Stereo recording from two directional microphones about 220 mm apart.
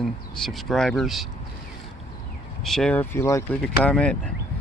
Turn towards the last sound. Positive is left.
turn(degrees=5)  # may be behind; listen again after turning